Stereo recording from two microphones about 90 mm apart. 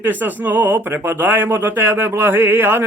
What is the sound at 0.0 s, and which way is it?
Speech, 20° right (ahead or behind).